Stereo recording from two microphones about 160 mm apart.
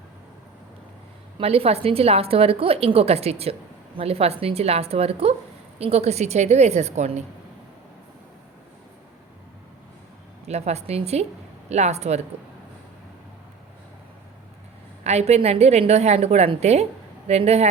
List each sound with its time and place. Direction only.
1.4 s a woman's voice: 40° right (ahead or behind)
10.4 s a woman's voice: 40° right (ahead or behind)
15.0 s a woman's voice: 40° right (ahead or behind)